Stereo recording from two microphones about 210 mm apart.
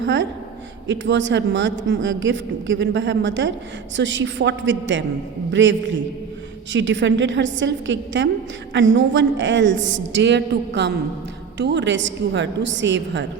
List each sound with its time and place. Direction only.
0.0 s a woman's voice: 60° right (ahead or behind)